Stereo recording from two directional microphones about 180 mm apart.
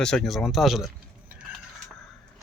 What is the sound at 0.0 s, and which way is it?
Speech, 5° left (ahead or behind).